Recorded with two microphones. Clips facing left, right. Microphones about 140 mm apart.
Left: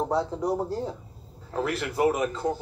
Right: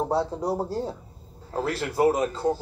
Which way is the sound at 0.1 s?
30° right (ahead or behind).